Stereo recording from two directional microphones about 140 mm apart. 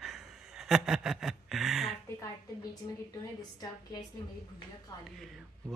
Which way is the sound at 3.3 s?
30° left (ahead or behind).